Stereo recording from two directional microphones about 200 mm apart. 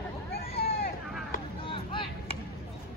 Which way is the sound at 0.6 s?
45° left (ahead or behind).